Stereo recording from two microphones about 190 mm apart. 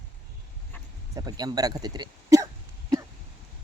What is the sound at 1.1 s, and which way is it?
Speech, 20° right (ahead or behind).